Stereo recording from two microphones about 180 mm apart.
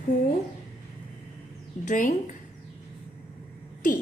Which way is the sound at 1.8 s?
45° left (ahead or behind).